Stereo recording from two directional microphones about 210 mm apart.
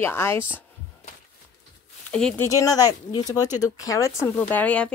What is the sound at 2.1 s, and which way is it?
Speech, 5° left (ahead or behind).